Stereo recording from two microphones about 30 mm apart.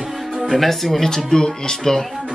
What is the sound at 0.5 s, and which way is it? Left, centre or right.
Speech, centre.